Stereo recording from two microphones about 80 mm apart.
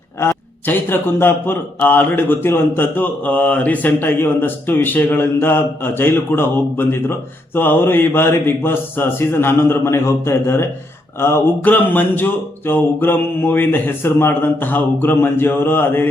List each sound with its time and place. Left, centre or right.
0.2 s a man's voice: left